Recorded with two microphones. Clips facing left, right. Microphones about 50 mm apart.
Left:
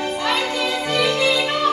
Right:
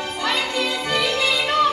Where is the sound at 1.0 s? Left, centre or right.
Left.